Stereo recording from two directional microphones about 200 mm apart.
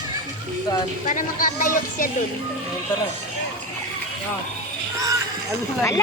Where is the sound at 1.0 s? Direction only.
40° left (ahead or behind).